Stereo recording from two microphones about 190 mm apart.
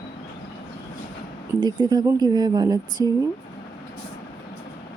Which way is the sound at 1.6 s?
25° right (ahead or behind).